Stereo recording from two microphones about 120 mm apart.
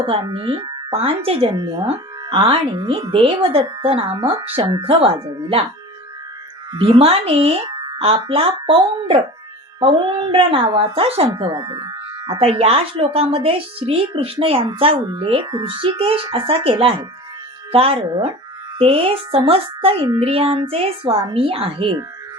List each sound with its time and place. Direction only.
0.0 s speech: 50° right (ahead or behind)
6.7 s speech: 50° right (ahead or behind)
7.7 s music: 35° right (ahead or behind)
7.9 s speech: 55° right (ahead or behind); by 12.3 s 35° right (ahead or behind)
12.3 s speech: 50° right (ahead or behind)